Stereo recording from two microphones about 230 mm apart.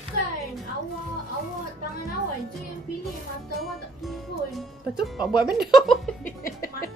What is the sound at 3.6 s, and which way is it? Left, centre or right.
Music, centre.